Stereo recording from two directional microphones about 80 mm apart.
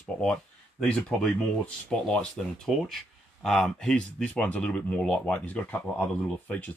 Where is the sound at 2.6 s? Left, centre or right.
Centre.